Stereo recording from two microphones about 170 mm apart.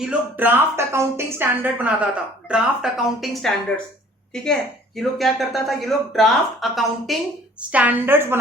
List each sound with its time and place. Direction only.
0.0 s a woman's voice: 10° right (ahead or behind)
4.9 s a woman's voice: centre (ahead or behind)